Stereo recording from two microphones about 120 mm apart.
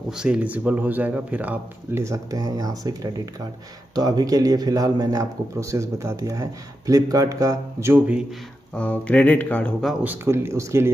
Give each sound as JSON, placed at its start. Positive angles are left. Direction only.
{"t": 0.1, "sound": "a man's voice", "side_deg": -5}
{"t": 8.7, "sound": "speech", "side_deg": 10}
{"t": 10.0, "sound": "a man's voice", "side_deg": -20}